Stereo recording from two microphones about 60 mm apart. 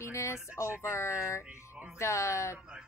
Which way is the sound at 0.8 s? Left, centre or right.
Left.